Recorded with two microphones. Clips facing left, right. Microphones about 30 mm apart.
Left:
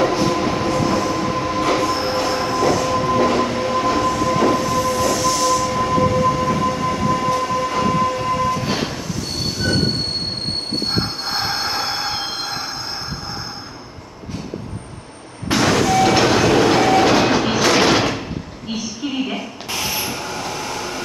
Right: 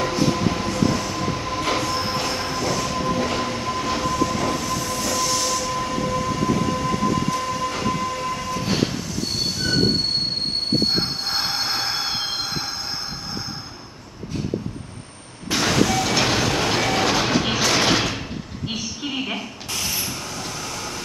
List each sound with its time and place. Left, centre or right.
0.0 s train: centre
10.9 s train: centre
15.5 s vehicle: centre
16.2 s train: centre
17.6 s sliding door: centre
19.7 s vehicle: centre